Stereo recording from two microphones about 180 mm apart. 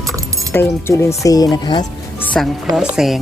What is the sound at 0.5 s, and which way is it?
Speech, 15° left (ahead or behind).